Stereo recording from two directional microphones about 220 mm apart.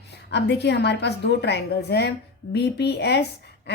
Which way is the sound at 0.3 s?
50° left (ahead or behind).